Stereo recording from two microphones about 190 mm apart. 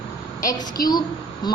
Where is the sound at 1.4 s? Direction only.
20° left (ahead or behind).